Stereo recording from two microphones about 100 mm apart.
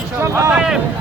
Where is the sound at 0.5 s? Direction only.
5° right (ahead or behind).